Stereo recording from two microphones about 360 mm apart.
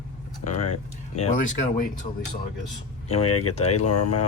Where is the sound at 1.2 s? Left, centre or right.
Left.